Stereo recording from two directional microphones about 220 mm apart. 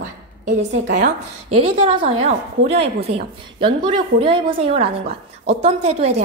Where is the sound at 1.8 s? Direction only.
25° right (ahead or behind).